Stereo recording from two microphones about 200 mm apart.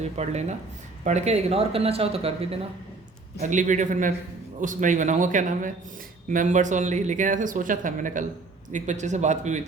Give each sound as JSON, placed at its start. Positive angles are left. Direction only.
{"t": 0.0, "sound": "speech", "side_deg": -35}